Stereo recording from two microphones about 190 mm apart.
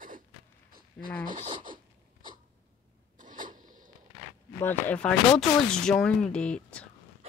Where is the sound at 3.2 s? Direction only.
45° right (ahead or behind).